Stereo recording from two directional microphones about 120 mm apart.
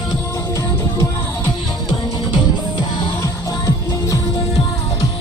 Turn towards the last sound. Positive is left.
turn(degrees=30)  # may be behind; listen again after turning